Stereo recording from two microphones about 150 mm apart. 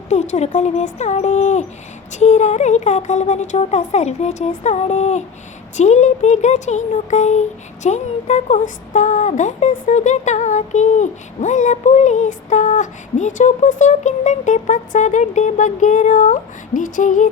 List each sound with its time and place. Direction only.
0.1 s speech: 50° left (ahead or behind)